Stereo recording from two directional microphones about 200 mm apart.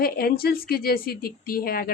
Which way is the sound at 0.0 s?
50° left (ahead or behind).